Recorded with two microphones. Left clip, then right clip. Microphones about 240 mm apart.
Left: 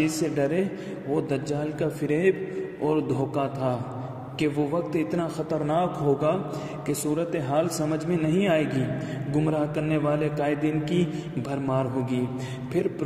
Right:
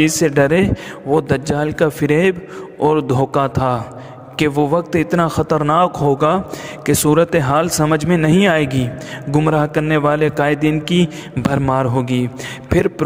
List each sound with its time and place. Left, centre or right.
0.0 s a man's voice: right